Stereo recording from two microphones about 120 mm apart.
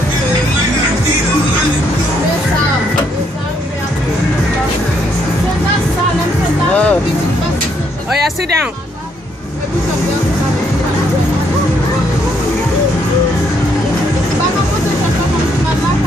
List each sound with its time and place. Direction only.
6.7 s music: 10° left (ahead or behind)